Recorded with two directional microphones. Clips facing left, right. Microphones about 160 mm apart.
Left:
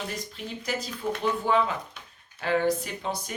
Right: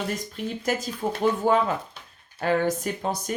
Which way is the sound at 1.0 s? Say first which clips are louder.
Right 5 dB; 55° right (ahead or behind).